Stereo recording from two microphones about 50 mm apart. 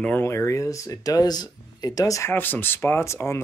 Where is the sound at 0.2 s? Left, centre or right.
Left.